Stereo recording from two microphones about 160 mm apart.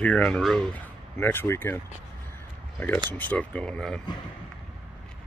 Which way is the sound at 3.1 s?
10° left (ahead or behind).